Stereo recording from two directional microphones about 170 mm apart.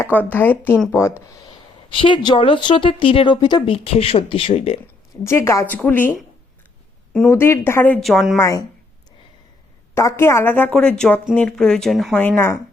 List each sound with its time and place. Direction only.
0.0 s speech: 10° left (ahead or behind)
1.9 s speech: 30° left (ahead or behind)
5.2 s speech: 15° left (ahead or behind)
7.3 s speech: 15° left (ahead or behind)
8.0 s a woman's voice: centre (ahead or behind)
8.4 s a woman's voice: 20° left (ahead or behind)
9.9 s speech: 15° left (ahead or behind)